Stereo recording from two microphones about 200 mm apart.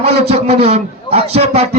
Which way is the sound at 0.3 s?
30° right (ahead or behind).